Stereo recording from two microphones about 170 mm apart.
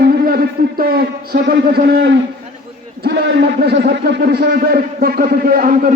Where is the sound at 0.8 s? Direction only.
60° right (ahead or behind).